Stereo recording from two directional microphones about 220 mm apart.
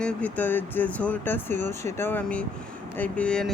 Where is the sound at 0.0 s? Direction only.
5° left (ahead or behind).